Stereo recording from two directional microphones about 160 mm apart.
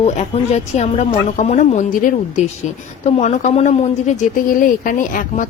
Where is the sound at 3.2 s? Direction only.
45° left (ahead or behind).